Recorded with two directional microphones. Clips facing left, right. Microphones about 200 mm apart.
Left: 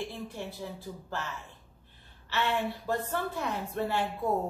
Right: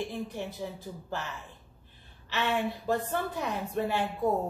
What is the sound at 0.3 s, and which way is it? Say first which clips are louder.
Speech: right 2 dB; 20° right (ahead or behind).